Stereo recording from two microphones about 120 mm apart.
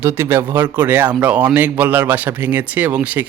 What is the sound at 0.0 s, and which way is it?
A man's voice, 20° right (ahead or behind).